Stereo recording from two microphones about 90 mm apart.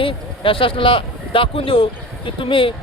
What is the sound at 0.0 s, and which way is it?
Speech, 80° left.